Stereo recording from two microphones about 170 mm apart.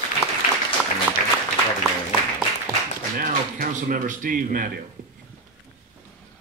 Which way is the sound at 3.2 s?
55° right (ahead or behind).